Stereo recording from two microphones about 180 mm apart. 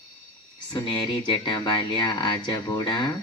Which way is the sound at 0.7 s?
25° left (ahead or behind).